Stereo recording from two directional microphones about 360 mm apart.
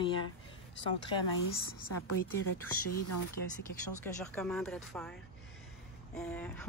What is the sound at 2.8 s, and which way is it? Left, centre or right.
Speech, left.